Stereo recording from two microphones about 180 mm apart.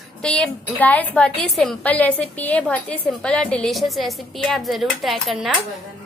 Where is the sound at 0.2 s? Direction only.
5° left (ahead or behind).